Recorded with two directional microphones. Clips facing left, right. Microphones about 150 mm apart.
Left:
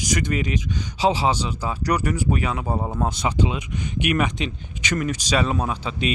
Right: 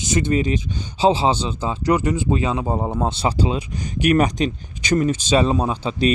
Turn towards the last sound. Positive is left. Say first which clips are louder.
# right 5 dB
turn(degrees=-30)  # may be behind; listen again after turning